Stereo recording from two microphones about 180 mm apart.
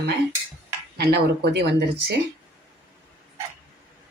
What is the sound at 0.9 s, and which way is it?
Speech, 60° right (ahead or behind).